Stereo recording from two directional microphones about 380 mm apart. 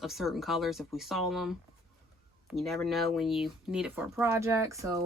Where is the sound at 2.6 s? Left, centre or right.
Centre.